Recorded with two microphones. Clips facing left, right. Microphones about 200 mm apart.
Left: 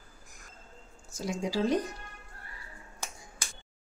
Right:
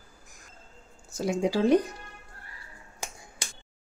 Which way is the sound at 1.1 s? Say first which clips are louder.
Right 5 dB; 60° right (ahead or behind).